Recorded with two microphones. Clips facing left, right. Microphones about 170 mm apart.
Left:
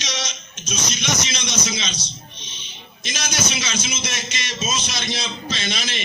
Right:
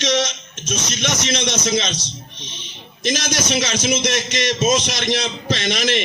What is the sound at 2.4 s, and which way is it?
A man's voice, 65° right (ahead or behind).